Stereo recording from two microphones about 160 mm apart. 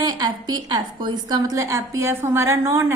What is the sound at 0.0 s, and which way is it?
A woman's voice, 25° right (ahead or behind).